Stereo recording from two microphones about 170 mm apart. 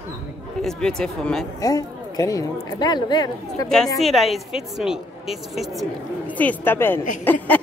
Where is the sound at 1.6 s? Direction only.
20° left (ahead or behind).